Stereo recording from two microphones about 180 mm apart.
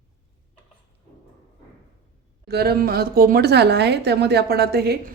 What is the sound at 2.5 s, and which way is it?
A woman's voice, 60° right (ahead or behind).